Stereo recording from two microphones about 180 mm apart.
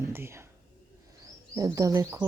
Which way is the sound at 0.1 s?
15° right (ahead or behind).